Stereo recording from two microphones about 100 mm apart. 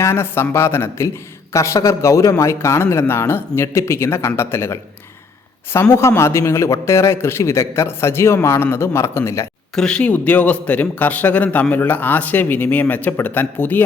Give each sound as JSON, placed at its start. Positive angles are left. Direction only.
{"t": 0.0, "sound": "a man's voice", "side_deg": 25}
{"t": 9.7, "sound": "a man's voice", "side_deg": 5}